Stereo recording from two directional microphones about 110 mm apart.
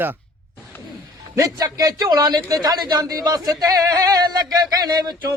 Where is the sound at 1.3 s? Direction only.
35° right (ahead or behind).